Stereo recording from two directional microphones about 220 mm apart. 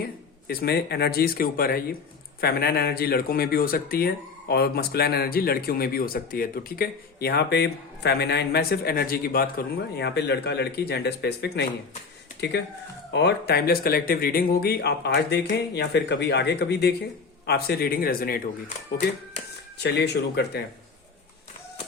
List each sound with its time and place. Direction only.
0.0 s speech: 45° left (ahead or behind)
19.8 s speech: 50° left (ahead or behind)